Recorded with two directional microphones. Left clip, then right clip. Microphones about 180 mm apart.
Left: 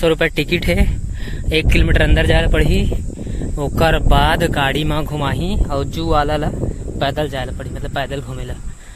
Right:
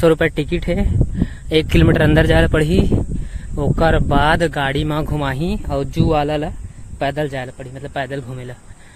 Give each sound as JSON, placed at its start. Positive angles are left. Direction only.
{"t": 0.2, "sound": "speech", "side_deg": -15}
{"t": 0.5, "sound": "speech", "side_deg": 0}
{"t": 1.2, "sound": "a sound", "side_deg": -15}
{"t": 2.0, "sound": "speech", "side_deg": -40}
{"t": 3.6, "sound": "speech", "side_deg": -10}
{"t": 5.1, "sound": "speech", "side_deg": -25}
{"t": 7.0, "sound": "speech", "side_deg": -10}